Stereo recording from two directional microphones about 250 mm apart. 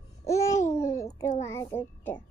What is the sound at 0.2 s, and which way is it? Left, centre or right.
Babbling, centre.